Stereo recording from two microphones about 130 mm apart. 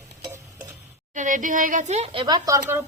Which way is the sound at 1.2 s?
80° right.